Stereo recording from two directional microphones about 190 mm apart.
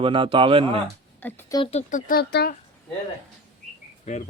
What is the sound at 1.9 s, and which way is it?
Speech, 45° left (ahead or behind).